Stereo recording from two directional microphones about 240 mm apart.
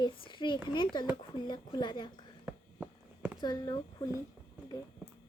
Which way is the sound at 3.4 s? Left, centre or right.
Centre.